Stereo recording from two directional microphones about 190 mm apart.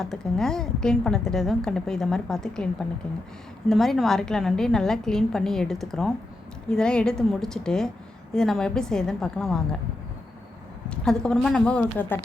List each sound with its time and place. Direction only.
0.0 s a woman's voice: 5° left (ahead or behind)
3.7 s a woman's voice: centre (ahead or behind)
10.8 s a woman's voice: 5° left (ahead or behind)